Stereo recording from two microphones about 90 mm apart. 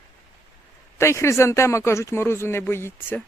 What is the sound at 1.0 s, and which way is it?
Speech, 30° left (ahead or behind).